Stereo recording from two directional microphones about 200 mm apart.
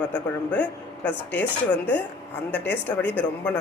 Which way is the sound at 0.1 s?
10° left (ahead or behind).